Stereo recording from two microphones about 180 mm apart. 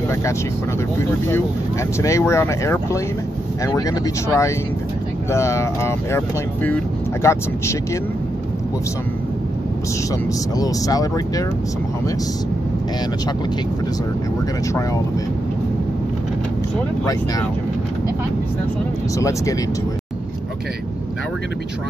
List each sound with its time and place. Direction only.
0.9 s speech: 15° left (ahead or behind)
10.6 s speech: 20° left (ahead or behind)
17.0 s speech: 20° left (ahead or behind)
19.1 s speech: 20° left (ahead or behind)